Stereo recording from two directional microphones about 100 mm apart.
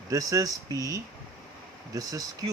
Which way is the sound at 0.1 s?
35° right (ahead or behind).